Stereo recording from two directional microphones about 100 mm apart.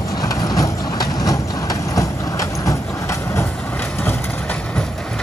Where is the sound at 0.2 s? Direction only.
35° left (ahead or behind).